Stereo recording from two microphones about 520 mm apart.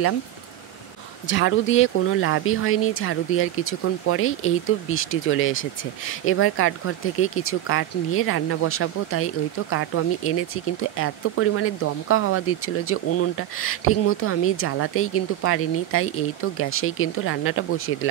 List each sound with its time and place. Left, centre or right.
1.2 s speech: left